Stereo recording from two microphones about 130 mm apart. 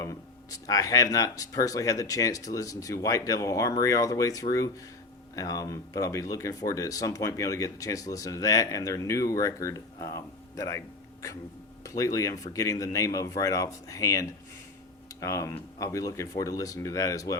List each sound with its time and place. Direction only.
0.0 s speech: 25° left (ahead or behind)